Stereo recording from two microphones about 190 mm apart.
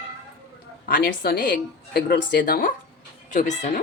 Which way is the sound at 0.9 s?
55° left (ahead or behind).